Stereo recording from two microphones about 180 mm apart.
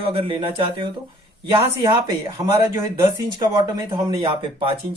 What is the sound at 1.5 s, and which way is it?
Speech, 20° right (ahead or behind).